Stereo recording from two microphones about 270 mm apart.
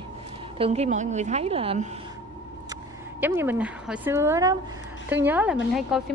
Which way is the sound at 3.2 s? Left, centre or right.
Centre.